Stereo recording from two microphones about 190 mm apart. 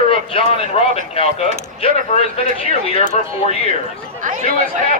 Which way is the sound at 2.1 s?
35° left (ahead or behind).